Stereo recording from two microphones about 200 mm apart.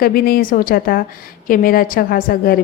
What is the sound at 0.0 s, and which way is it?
A woman's voice, 45° left (ahead or behind).